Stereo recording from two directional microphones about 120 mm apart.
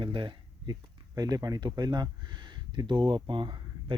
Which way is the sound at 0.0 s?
45° right (ahead or behind).